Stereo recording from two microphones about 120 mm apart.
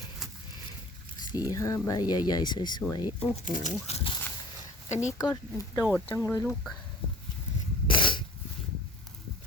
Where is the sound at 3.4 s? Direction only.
90° left.